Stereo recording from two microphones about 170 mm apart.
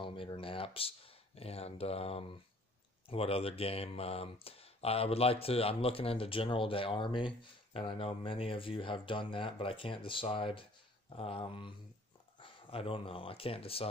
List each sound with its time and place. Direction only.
0.0 s speech: 30° left (ahead or behind)